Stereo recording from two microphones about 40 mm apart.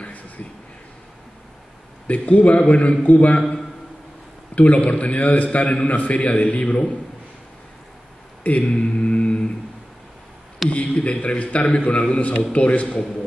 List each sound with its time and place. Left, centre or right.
0.0 s a sound: left
2.0 s a man's voice: left
4.6 s a man's voice: left
8.5 s mantra: left
10.7 s a man's voice: left